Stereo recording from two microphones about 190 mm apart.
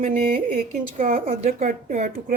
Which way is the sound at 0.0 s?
40° right (ahead or behind).